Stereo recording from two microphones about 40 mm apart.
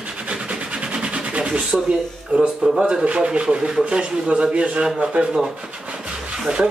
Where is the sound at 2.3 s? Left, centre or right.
Centre.